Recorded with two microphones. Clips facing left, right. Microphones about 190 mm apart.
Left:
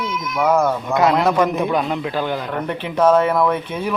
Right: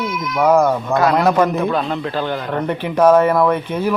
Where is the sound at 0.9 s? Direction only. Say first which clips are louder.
Right 1 dB; 20° left (ahead or behind).